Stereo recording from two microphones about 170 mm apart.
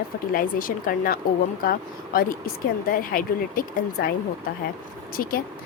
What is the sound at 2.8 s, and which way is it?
Speech, 55° left (ahead or behind).